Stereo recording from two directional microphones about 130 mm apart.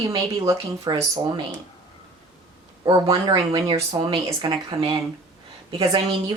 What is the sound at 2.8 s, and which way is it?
Speech, 35° right (ahead or behind).